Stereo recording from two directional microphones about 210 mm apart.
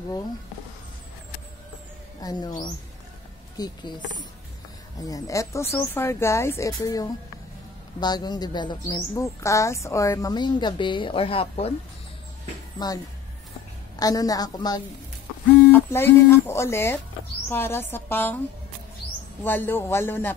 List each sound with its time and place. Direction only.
2.2 s speech: 15° left (ahead or behind)
3.5 s speech: 20° left (ahead or behind)
12.7 s speech: 20° left (ahead or behind)
19.4 s speech: 10° left (ahead or behind)